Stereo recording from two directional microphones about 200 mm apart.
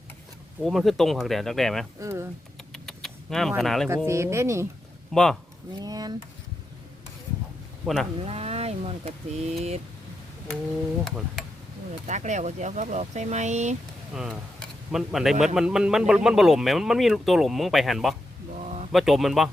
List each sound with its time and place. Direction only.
0.6 s a man's voice: centre (ahead or behind)
2.0 s speech: 10° right (ahead or behind)
2.7 s vehicle: centre (ahead or behind)
3.6 s a man's voice: centre (ahead or behind)
3.8 s speech: 15° right (ahead or behind)
5.1 s a man's voice: 5° left (ahead or behind)
5.8 s speech: 20° right (ahead or behind)
8.2 s speech: 30° right (ahead or behind)
12.0 s speech: 35° right (ahead or behind)
14.1 s a man's voice: 5° right (ahead or behind)
18.6 s a sound: 35° right (ahead or behind)
18.9 s a man's voice: centre (ahead or behind)